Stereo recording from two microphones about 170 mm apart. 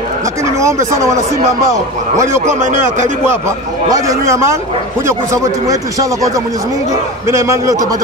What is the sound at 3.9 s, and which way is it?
Speech, 20° right (ahead or behind).